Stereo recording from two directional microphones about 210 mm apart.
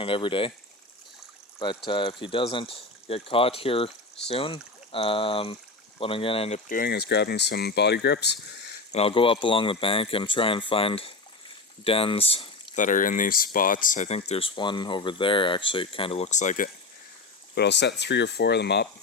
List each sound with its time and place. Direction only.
0.0 s speech: 25° left (ahead or behind)
1.5 s speech: 25° left (ahead or behind); by 8.7 s 55° left (ahead or behind)
8.9 s speech: 30° left (ahead or behind)
17.5 s speech: 55° left (ahead or behind)